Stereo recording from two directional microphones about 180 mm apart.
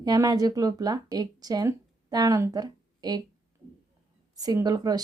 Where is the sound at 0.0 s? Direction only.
25° right (ahead or behind).